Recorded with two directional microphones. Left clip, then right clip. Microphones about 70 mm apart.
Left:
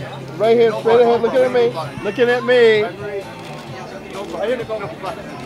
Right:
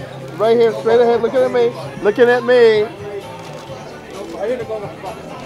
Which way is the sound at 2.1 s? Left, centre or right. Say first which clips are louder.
Right 3 dB; centre.